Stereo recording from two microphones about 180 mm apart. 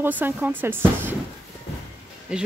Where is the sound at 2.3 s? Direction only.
5° right (ahead or behind).